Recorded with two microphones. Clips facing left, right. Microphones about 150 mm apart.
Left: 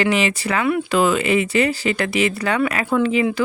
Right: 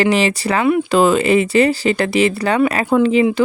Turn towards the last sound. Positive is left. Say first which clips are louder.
# right 5 dB
turn(degrees=-30)  # may be behind; listen again after turning